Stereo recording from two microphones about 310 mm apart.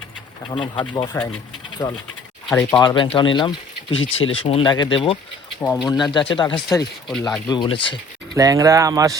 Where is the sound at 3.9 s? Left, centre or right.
Left.